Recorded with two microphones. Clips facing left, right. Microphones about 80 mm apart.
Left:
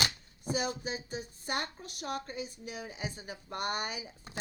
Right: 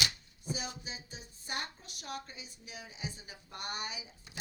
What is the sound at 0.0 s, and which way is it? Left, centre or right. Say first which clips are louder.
Speech: left 3 dB; left.